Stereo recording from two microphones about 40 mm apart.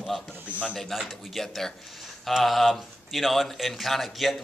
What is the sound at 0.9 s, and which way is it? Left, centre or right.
Speech, centre.